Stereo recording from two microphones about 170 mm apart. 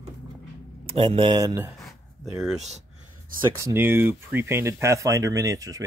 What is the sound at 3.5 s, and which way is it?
Speech, 15° right (ahead or behind).